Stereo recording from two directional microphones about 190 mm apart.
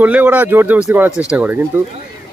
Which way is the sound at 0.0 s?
10° right (ahead or behind).